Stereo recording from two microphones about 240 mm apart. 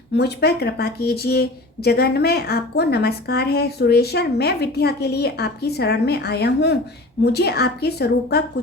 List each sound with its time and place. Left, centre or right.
0.2 s a woman's voice: left